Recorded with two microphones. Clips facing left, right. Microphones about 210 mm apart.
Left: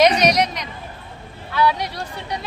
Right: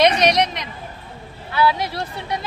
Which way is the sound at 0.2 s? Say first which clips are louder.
Even; centre (ahead or behind).